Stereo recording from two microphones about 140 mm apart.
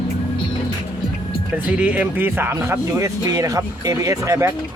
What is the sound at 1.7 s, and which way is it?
Speech, 10° right (ahead or behind).